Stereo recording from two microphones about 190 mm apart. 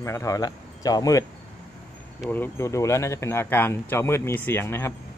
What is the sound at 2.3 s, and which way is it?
Speech, 10° left (ahead or behind).